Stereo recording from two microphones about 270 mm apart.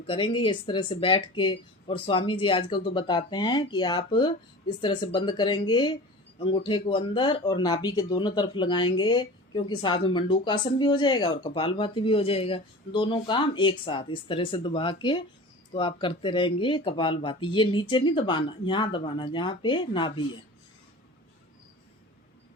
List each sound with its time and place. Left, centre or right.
0.1 s speech: centre